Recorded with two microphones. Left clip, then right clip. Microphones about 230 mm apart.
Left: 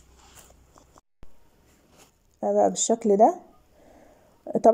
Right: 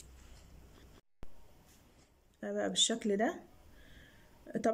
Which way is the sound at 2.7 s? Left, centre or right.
Centre.